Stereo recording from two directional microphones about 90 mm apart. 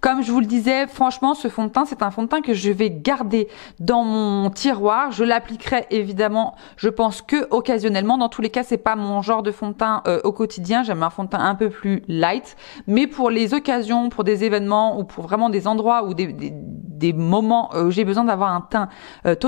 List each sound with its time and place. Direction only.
0.0 s speech: 15° left (ahead or behind)